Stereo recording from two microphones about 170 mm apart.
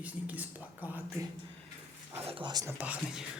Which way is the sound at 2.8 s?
10° right (ahead or behind).